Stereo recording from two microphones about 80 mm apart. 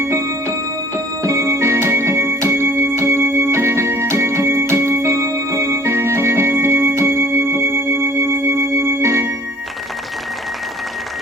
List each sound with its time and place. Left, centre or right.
0.0 s music: right